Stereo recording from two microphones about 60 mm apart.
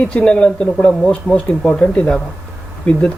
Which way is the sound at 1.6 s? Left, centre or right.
Centre.